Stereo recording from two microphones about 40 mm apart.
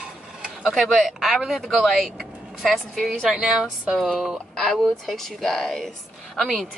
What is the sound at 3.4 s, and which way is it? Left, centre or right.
Speech, right.